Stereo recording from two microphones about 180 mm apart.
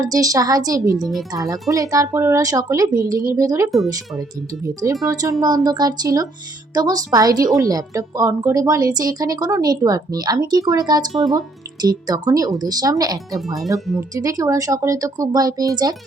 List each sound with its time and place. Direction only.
0.0 s a woman's voice: 20° right (ahead or behind)
0.9 s speech: centre (ahead or behind)
1.3 s a woman's voice: 20° right (ahead or behind)
13.3 s speech: centre (ahead or behind)
14.2 s a woman's voice: 20° right (ahead or behind)